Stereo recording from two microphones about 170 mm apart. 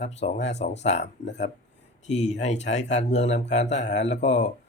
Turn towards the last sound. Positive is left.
turn(degrees=45)  # may be behind; listen again after turning